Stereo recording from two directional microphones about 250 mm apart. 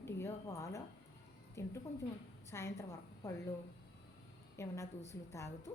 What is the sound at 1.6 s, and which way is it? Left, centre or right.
A woman's voice, centre.